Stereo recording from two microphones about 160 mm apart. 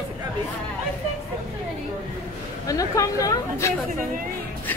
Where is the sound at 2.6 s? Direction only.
20° left (ahead or behind).